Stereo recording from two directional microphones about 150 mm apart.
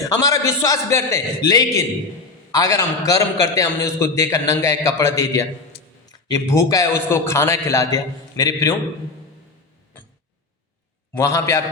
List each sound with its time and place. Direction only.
0.0 s a man's voice: 20° left (ahead or behind)
5.7 s a sound: 90° left
6.1 s a man's voice: 25° left (ahead or behind)
11.1 s a man's voice: 20° left (ahead or behind)